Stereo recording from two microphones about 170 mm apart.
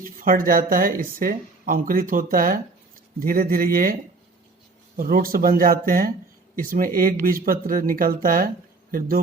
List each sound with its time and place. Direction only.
0.0 s speech: 55° right (ahead or behind)
4.9 s speech: 55° right (ahead or behind)